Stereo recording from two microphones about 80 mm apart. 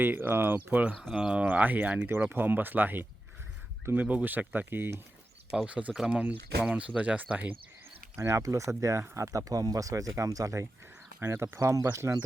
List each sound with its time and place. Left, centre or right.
0.0 s speech: right
5.6 s speech: centre
8.1 s speech: right